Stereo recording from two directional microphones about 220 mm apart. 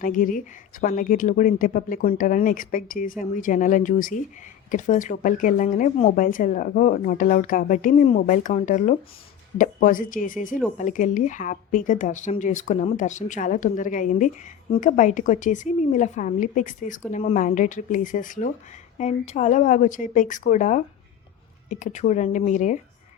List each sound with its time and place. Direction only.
0.0 s speech: 40° left (ahead or behind)